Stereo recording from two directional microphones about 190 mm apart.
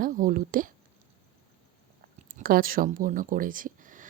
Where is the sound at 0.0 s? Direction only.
45° right (ahead or behind).